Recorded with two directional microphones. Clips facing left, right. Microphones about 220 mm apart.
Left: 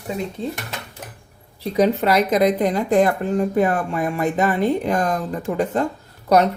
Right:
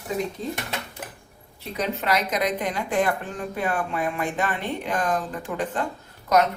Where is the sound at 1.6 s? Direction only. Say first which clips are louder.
Left 11 dB; 35° left (ahead or behind).